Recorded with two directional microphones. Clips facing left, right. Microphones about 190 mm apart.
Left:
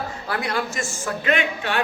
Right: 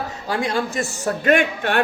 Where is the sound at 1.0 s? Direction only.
45° right (ahead or behind).